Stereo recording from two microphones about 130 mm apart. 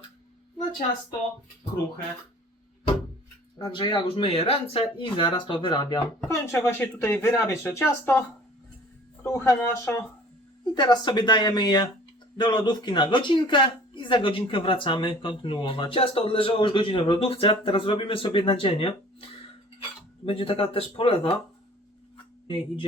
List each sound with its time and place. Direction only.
3.6 s speech: 35° left (ahead or behind)
6.2 s speech: 20° left (ahead or behind)
9.2 s speech: 20° left (ahead or behind)
10.8 s speech: 35° left (ahead or behind)
20.2 s speech: 45° left (ahead or behind)